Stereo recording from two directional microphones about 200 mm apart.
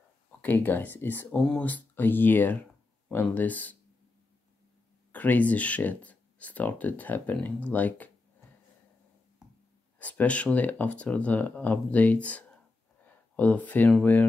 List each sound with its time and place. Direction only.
0.4 s speech: 10° left (ahead or behind)
5.1 s speech: 10° left (ahead or behind)
9.9 s speech: 5° left (ahead or behind)